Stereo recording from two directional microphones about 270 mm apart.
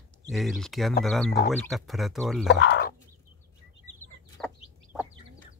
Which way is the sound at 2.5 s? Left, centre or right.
Left.